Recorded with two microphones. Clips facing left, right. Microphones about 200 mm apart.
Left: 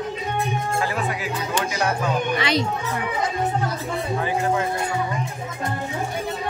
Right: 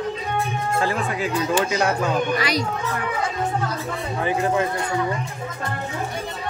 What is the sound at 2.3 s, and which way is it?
Speech, 25° left (ahead or behind).